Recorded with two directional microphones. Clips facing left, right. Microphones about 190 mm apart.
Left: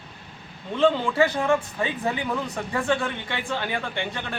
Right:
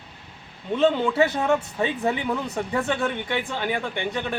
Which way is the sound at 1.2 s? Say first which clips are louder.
Even; 20° right (ahead or behind).